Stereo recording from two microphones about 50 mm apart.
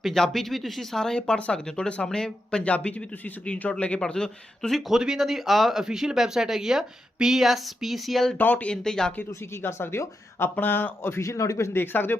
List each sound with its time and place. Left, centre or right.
0.0 s speech: centre
1.4 s a man's voice: left
4.0 s a man's voice: centre
4.7 s a woman's voice: centre
8.4 s speech: left
8.7 s a man's voice: centre
9.3 s speech: left
10.5 s speech: left
11.2 s a man's voice: left
11.7 s speech: left